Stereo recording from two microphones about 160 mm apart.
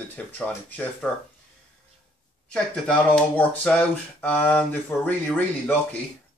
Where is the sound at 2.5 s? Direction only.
10° left (ahead or behind).